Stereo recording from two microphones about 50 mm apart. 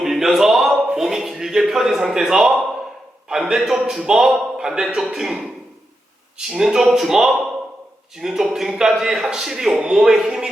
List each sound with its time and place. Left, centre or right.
0.0 s a sound: centre
0.9 s a man's voice: centre
6.5 s a man's voice: centre